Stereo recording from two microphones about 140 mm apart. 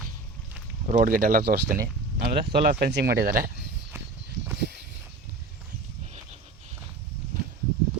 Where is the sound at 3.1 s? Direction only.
90° right.